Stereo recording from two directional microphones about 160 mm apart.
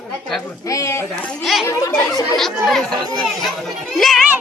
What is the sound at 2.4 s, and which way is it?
A child's voice, centre (ahead or behind).